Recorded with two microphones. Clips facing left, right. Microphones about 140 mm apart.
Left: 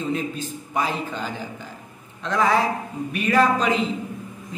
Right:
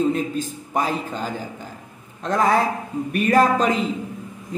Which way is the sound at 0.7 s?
40° right (ahead or behind).